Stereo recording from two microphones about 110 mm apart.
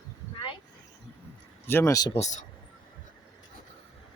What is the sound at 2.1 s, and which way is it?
Speech, 90° left.